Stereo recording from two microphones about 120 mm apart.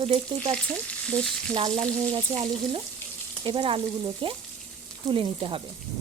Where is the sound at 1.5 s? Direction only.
45° right (ahead or behind).